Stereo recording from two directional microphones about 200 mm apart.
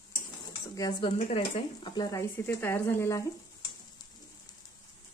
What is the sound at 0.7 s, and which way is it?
Speech, 20° left (ahead or behind).